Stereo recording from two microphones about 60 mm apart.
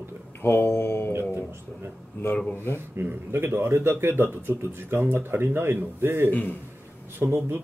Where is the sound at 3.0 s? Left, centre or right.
Right.